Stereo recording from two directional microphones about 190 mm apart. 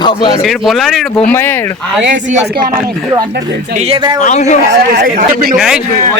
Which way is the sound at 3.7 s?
30° right (ahead or behind).